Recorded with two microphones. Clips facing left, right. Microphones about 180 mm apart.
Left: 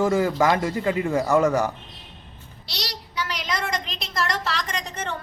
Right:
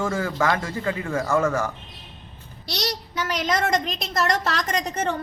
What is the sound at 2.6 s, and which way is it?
A woman's voice, 45° right (ahead or behind).